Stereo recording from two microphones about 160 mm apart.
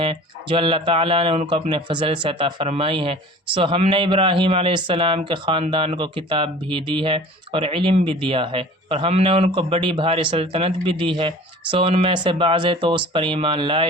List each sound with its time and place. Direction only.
0.0 s speech: 35° right (ahead or behind)